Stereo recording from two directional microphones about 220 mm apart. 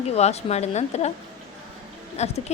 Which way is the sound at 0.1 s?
30° left (ahead or behind).